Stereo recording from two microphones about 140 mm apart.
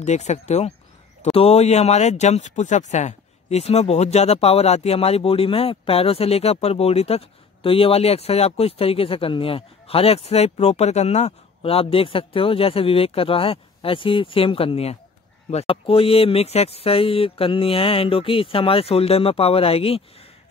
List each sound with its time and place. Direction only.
0.0 s speech: 55° left (ahead or behind)